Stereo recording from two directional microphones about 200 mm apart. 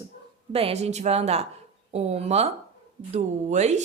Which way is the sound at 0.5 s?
30° right (ahead or behind).